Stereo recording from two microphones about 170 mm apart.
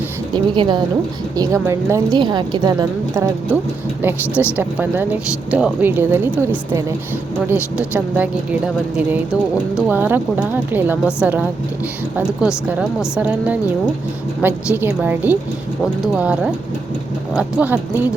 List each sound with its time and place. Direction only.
0.5 s a woman's voice: 30° right (ahead or behind)
1.4 s a woman's voice: 20° right (ahead or behind)